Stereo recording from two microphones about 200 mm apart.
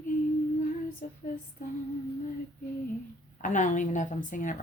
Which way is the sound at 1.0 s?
40° left (ahead or behind).